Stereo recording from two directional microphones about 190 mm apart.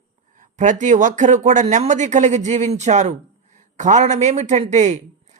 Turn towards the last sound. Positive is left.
turn(degrees=-40)  # may be behind; listen again after turning